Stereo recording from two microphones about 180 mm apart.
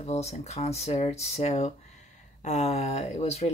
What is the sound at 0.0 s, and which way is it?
Speech, 40° left (ahead or behind).